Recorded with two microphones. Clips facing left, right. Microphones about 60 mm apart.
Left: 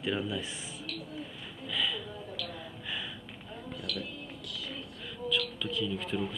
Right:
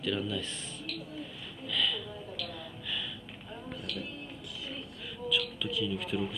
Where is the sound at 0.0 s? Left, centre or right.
Left.